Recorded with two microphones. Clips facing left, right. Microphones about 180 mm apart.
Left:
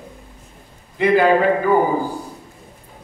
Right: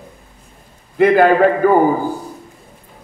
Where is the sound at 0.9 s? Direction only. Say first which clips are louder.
Right 3 dB; 55° right (ahead or behind).